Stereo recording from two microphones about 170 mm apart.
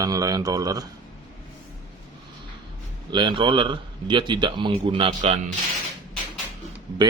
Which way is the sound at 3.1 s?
30° right (ahead or behind).